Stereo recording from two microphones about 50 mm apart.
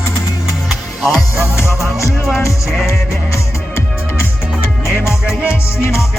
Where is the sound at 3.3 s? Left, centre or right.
Left.